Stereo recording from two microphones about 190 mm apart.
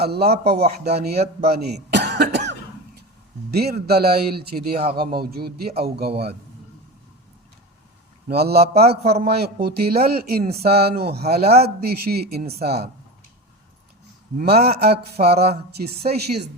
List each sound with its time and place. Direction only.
0.0 s speech: 60° right (ahead or behind)
1.4 s cough: 55° right (ahead or behind)
3.5 s speech: 55° right (ahead or behind)
8.3 s speech: 55° right (ahead or behind)
14.3 s speech: 55° right (ahead or behind)